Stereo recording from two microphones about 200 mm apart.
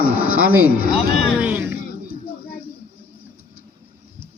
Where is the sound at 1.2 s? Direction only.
5° right (ahead or behind).